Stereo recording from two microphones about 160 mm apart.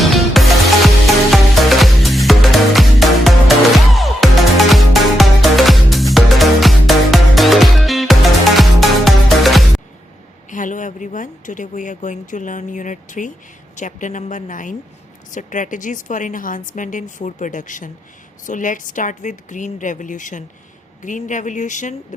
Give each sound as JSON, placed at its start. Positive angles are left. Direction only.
{"t": 0.0, "sound": "music", "side_deg": 0}
{"t": 10.5, "sound": "a woman's voice", "side_deg": 55}